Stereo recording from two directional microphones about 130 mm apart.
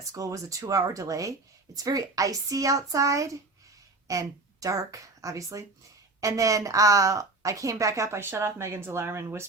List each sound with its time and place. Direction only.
0.1 s a woman's voice: 25° right (ahead or behind)